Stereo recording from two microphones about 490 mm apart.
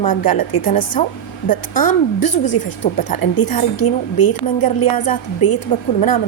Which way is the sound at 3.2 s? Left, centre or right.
Left.